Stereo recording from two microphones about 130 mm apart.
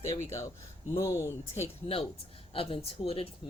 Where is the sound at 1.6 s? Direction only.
45° left (ahead or behind).